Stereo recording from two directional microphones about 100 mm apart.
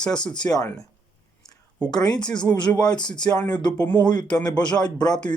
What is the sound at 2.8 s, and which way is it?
Speech, 45° left (ahead or behind).